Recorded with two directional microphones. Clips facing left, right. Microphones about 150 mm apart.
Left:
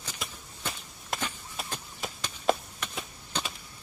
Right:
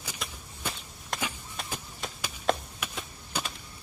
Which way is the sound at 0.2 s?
Centre (ahead or behind).